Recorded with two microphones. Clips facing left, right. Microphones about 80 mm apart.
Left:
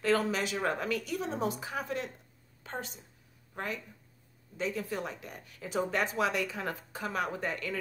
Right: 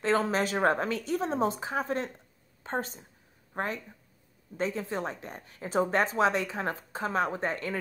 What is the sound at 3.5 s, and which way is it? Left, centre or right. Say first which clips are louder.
A woman's voice: right 4 dB; right.